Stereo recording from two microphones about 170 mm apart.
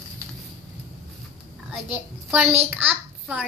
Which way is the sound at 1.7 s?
5° right (ahead or behind).